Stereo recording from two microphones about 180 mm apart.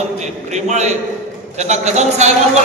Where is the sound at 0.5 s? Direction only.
40° right (ahead or behind).